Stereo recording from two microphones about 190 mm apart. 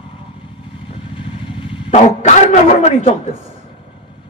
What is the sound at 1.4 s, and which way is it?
A man's voice, 25° left (ahead or behind).